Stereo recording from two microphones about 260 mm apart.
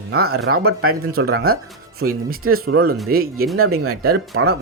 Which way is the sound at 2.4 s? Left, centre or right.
Right.